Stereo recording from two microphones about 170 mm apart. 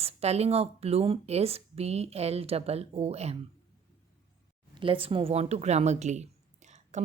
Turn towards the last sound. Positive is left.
turn(degrees=-45)  # may be behind; listen again after turning